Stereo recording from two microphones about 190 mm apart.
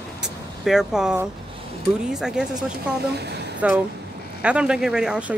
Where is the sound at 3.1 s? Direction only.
60° right (ahead or behind).